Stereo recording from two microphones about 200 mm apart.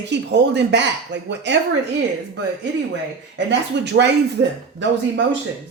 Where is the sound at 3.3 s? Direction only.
60° right (ahead or behind).